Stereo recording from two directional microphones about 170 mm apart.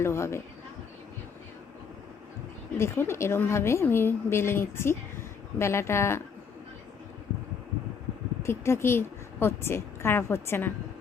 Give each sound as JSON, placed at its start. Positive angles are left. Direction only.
{"t": 0.0, "sound": "a woman's voice", "side_deg": 15}
{"t": 2.7, "sound": "a woman's voice", "side_deg": 15}
{"t": 8.4, "sound": "a woman's voice", "side_deg": 15}